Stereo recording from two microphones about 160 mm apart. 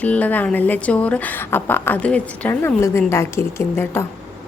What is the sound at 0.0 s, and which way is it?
A woman's voice, 10° left (ahead or behind).